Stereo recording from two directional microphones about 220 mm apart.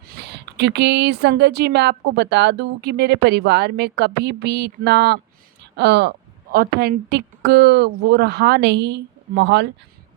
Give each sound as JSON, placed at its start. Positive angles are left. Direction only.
{"t": 0.2, "sound": "a woman's voice", "side_deg": -50}